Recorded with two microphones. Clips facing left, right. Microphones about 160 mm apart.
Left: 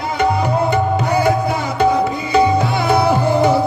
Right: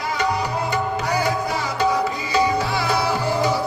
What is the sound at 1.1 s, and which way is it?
Music, 55° left (ahead or behind).